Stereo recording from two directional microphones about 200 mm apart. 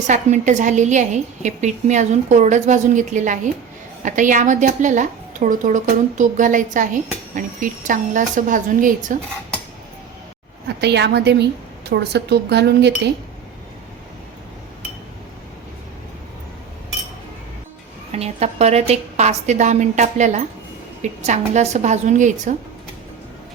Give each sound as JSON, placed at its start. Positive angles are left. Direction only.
{"t": 0.1, "sound": "a woman's voice", "side_deg": -35}
{"t": 10.8, "sound": "speech", "side_deg": -55}
{"t": 18.1, "sound": "a woman's voice", "side_deg": -30}